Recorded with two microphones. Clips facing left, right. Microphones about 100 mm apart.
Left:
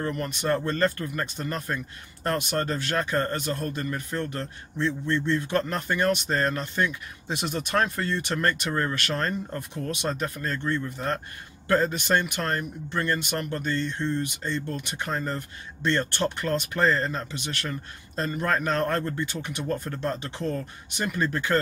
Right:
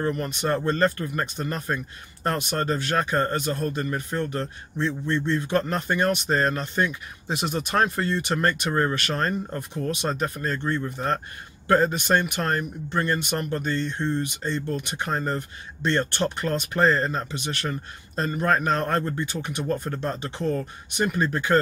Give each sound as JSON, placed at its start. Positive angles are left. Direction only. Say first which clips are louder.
{"t": 0.0, "sound": "speech", "louder": "right 3 dB", "side_deg": -20}